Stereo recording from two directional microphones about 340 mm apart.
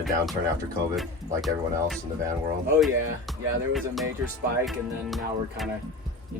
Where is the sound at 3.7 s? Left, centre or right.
Centre.